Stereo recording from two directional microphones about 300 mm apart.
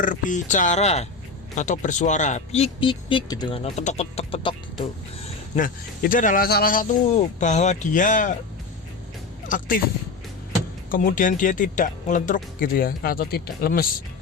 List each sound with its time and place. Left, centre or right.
0.0 s speech: left
5.5 s speech: left
9.5 s speech: left
10.9 s speech: left